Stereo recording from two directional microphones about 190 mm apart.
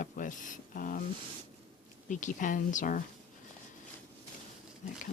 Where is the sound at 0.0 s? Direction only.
45° left (ahead or behind).